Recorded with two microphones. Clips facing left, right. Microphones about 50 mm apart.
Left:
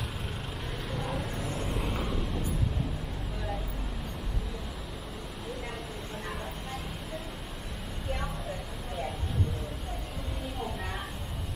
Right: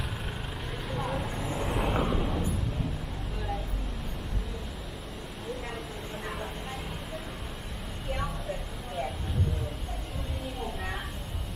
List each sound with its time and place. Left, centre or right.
0.8 s vehicle: centre
1.9 s vehicle: centre